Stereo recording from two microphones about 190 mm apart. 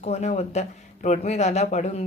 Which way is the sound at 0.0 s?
35° left (ahead or behind).